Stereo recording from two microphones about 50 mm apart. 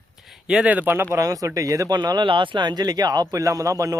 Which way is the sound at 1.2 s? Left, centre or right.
Right.